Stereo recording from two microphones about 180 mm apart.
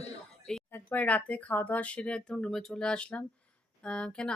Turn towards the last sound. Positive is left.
turn(degrees=5)  # may be behind; listen again after turning